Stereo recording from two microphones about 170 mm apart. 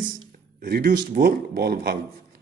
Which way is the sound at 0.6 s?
60° right (ahead or behind).